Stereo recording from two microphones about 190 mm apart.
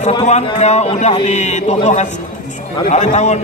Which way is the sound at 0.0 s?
35° left (ahead or behind).